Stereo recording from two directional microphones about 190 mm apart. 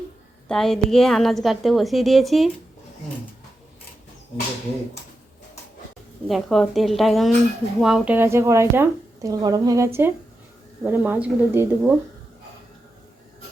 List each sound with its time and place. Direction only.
0.4 s a woman's voice: 5° left (ahead or behind)
6.2 s a woman's voice: centre (ahead or behind)